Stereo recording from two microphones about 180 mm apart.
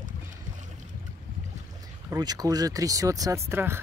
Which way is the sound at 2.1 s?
20° right (ahead or behind).